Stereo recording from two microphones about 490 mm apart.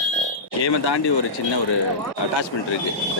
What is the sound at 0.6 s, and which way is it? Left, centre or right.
Speech, left.